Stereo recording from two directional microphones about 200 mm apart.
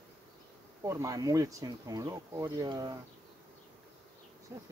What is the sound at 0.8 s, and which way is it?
Speech, 15° right (ahead or behind).